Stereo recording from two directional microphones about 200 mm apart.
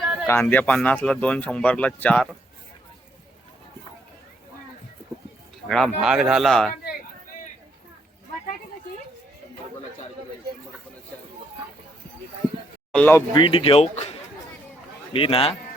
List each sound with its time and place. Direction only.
0.0 s a sound: 5° right (ahead or behind)
0.3 s speech: 10° left (ahead or behind)
5.6 s speech: centre (ahead or behind)
12.9 s speech: 10° left (ahead or behind)
13.3 s speech: 25° left (ahead or behind)